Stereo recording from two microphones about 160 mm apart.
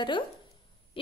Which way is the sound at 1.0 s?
35° left (ahead or behind).